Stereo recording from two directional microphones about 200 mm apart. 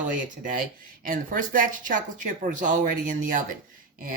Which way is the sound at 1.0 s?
40° right (ahead or behind).